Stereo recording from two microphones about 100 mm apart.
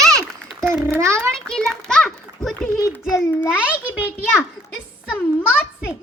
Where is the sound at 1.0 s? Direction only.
30° right (ahead or behind).